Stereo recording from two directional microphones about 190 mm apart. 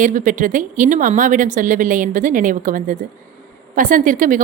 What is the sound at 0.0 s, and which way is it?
A woman's voice, 45° right (ahead or behind).